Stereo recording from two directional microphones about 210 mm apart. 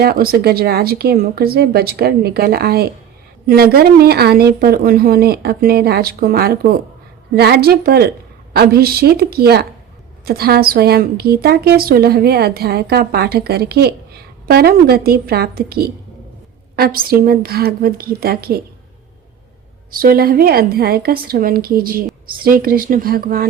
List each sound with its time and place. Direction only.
0.0 s a woman's voice: 45° right (ahead or behind)
19.9 s a woman's voice: 45° right (ahead or behind)